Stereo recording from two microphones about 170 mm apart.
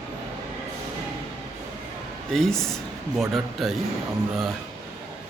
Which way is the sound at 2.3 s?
5° left (ahead or behind).